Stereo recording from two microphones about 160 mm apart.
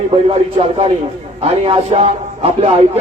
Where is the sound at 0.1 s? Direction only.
40° right (ahead or behind).